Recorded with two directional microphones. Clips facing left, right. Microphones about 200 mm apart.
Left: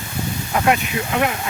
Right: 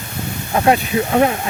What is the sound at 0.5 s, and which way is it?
Speech, 30° right (ahead or behind).